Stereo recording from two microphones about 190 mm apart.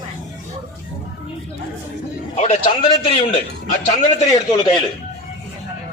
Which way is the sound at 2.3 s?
30° left (ahead or behind).